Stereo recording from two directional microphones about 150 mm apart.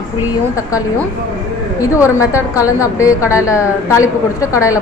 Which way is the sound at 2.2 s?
20° left (ahead or behind).